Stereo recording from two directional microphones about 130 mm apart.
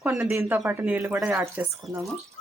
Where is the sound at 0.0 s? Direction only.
5° right (ahead or behind).